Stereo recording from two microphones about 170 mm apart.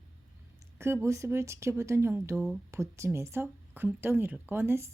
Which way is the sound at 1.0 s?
15° right (ahead or behind).